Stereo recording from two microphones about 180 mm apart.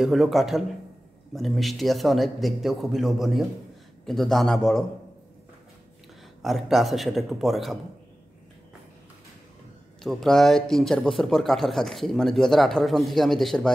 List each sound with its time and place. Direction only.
0.0 s speech: centre (ahead or behind)
6.4 s speech: centre (ahead or behind)
10.0 s speech: centre (ahead or behind)